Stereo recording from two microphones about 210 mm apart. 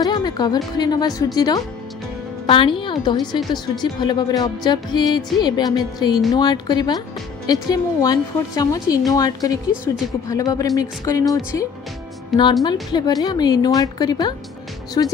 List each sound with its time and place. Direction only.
0.0 s music: 20° left (ahead or behind)
0.7 s a woman's voice: 20° left (ahead or behind)
12.3 s a woman's voice: centre (ahead or behind)
12.9 s speech: 20° left (ahead or behind)